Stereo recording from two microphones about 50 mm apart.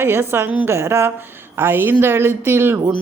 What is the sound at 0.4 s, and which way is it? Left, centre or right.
Speech, right.